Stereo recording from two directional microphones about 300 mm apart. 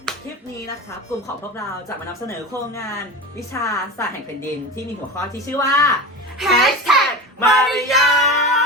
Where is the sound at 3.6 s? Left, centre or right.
Centre.